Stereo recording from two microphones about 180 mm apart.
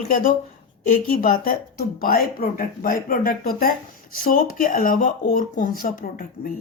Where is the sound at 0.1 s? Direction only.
50° left (ahead or behind).